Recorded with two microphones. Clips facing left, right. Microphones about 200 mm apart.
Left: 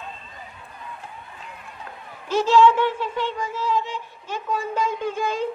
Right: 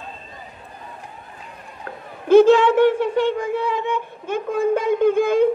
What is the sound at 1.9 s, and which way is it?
Speech, 55° right (ahead or behind).